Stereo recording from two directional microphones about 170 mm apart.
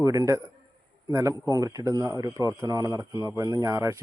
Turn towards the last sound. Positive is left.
turn(degrees=-20)  # may be behind; listen again after turning